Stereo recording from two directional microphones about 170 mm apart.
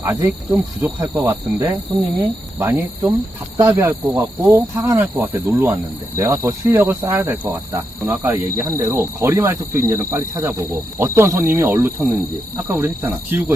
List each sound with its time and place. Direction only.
0.0 s speech: 15° right (ahead or behind)